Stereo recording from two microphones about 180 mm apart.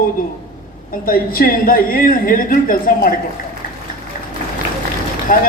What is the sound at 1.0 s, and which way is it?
A woman's voice, 55° left (ahead or behind).